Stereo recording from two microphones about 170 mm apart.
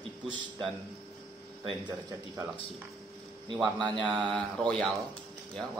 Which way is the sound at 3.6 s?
25° right (ahead or behind).